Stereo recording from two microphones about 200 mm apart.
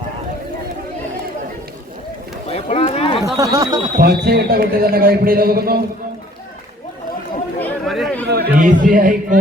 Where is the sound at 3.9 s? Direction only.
50° right (ahead or behind).